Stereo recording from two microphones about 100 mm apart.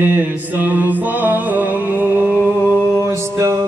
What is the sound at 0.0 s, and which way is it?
Music, 15° right (ahead or behind).